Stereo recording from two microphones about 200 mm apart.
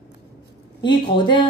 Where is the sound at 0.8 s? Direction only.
20° left (ahead or behind).